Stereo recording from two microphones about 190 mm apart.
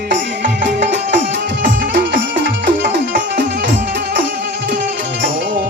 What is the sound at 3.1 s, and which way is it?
Music, 45° right (ahead or behind).